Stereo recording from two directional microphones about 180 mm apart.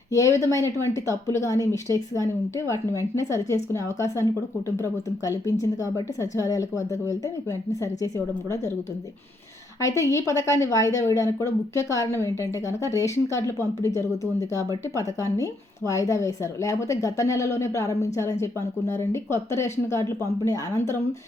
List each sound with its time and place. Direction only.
0.1 s a woman's voice: 15° left (ahead or behind)
9.8 s a woman's voice: 15° left (ahead or behind)
15.4 s a woman's voice: 15° left (ahead or behind)